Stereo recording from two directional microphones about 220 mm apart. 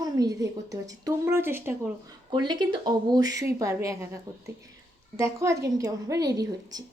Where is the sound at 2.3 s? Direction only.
20° right (ahead or behind).